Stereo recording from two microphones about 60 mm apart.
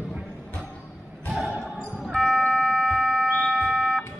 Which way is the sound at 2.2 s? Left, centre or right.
Centre.